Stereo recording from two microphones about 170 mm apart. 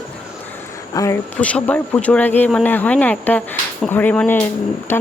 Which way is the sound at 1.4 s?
10° left (ahead or behind).